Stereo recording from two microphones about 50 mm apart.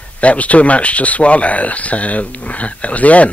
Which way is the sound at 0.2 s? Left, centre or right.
Left.